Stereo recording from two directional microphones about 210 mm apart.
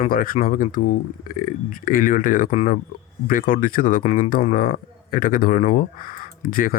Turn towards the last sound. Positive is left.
turn(degrees=40)  # may be behind; listen again after turning